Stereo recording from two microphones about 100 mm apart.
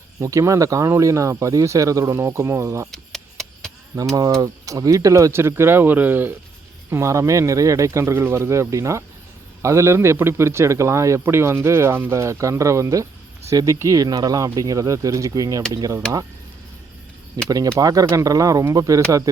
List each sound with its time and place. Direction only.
0.2 s speech: 30° right (ahead or behind)
2.9 s a sound: 5° left (ahead or behind)
4.1 s a man's voice: 35° right (ahead or behind)
17.4 s speech: 35° right (ahead or behind)